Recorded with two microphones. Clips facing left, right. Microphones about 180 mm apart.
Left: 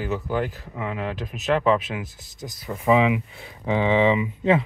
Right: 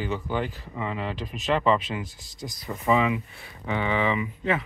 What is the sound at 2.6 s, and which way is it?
Speech, 5° left (ahead or behind).